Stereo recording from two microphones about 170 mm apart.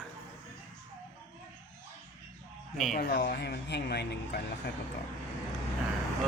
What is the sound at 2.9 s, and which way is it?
Speech, 70° left (ahead or behind).